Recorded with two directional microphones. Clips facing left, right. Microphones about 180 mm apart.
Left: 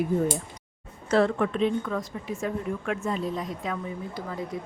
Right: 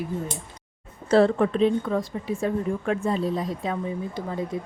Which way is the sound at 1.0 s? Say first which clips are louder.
Right 4 dB; 30° right (ahead or behind).